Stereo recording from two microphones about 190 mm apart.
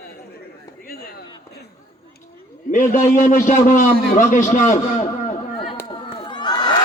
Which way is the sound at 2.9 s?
40° left (ahead or behind).